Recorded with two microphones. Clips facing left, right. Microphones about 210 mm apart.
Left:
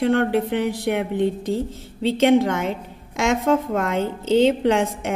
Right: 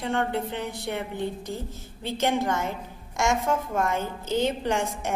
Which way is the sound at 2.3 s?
60° left (ahead or behind).